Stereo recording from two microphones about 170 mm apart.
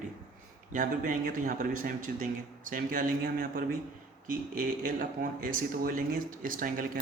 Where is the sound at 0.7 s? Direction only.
50° right (ahead or behind).